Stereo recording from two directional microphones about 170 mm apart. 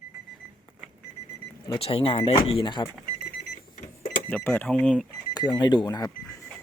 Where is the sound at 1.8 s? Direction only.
35° left (ahead or behind).